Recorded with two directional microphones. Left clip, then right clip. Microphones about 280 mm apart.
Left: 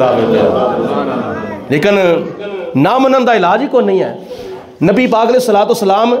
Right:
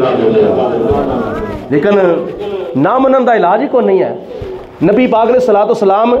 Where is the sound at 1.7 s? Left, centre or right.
Left.